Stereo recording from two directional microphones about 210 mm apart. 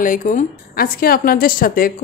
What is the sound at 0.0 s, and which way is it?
A woman's voice, 40° left (ahead or behind).